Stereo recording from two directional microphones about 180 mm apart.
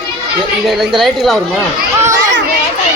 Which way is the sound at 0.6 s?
Centre (ahead or behind).